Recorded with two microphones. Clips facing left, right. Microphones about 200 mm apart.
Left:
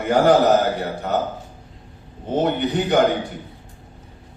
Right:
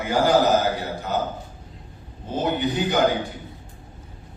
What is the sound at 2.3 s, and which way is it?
Speech, 65° left (ahead or behind).